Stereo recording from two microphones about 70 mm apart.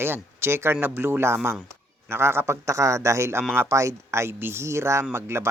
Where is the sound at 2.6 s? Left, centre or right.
Right.